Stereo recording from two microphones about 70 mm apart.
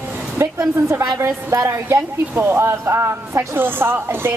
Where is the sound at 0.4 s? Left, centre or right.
Right.